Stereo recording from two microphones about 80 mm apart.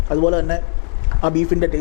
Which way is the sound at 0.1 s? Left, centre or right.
Centre.